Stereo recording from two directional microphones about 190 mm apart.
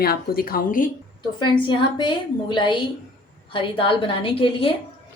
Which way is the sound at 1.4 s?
25° left (ahead or behind).